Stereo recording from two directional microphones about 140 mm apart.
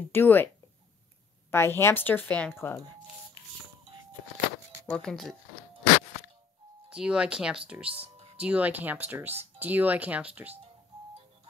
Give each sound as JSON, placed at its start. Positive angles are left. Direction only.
{"t": 0.1, "sound": "a woman's voice", "side_deg": 15}
{"t": 1.5, "sound": "a woman's voice", "side_deg": 20}
{"t": 4.8, "sound": "speech", "side_deg": 5}
{"t": 6.9, "sound": "speech", "side_deg": -5}